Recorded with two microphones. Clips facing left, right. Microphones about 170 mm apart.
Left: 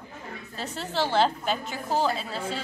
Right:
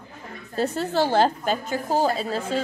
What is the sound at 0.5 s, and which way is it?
A woman's voice, 45° right (ahead or behind).